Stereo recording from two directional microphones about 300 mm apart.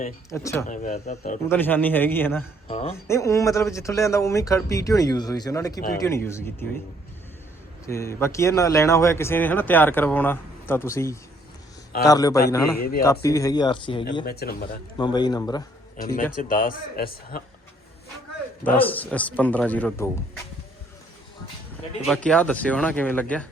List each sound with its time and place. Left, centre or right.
0.3 s speech: centre
0.7 s a man's voice: left
1.5 s speech: centre
2.6 s speech: centre
2.9 s speech: centre
7.9 s speech: centre
14.3 s speech: left
14.9 s speech: centre
16.4 s a man's voice: left
18.6 s speech: centre
22.0 s speech: centre